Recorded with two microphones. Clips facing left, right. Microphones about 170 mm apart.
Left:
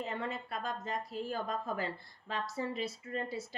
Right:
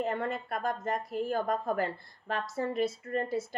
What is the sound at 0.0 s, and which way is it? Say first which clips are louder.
Speech: right 6 dB; 50° right (ahead or behind).